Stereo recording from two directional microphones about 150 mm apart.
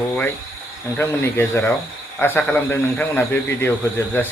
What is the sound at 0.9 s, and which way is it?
Speech, 15° left (ahead or behind).